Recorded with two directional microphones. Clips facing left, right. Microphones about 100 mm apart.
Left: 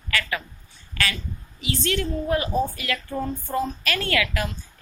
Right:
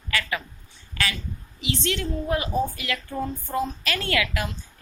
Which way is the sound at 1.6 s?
20° right (ahead or behind).